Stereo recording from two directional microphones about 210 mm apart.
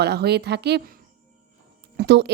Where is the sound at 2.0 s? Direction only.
55° right (ahead or behind).